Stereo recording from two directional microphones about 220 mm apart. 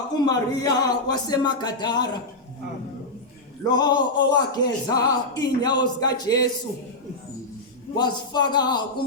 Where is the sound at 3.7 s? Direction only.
20° left (ahead or behind).